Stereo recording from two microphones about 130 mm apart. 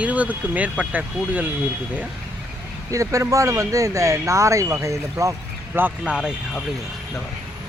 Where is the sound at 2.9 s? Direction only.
25° right (ahead or behind).